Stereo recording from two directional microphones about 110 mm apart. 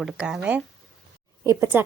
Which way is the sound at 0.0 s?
5° right (ahead or behind).